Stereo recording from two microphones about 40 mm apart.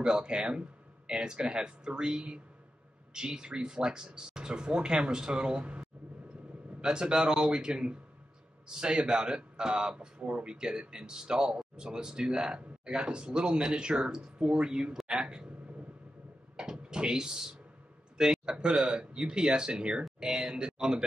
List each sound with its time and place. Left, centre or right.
0.0 s speech: right
16.5 s a sound: centre
18.1 s speech: centre